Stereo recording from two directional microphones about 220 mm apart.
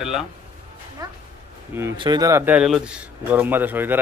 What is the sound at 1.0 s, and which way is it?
Speech, 15° right (ahead or behind).